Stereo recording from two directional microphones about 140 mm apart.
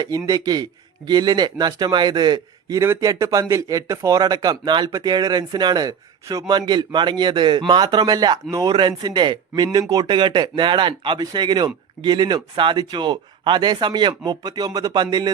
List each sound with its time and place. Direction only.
0.0 s a man's voice: 30° right (ahead or behind)